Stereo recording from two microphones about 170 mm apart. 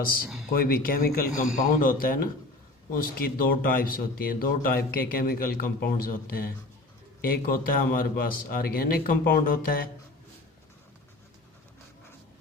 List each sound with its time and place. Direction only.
0.5 s speech: 60° left (ahead or behind)
7.2 s speech: 60° left (ahead or behind)